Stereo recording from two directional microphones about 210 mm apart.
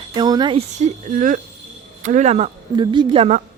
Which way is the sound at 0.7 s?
35° right (ahead or behind).